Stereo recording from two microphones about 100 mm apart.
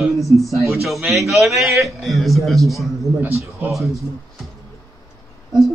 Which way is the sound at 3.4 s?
20° right (ahead or behind).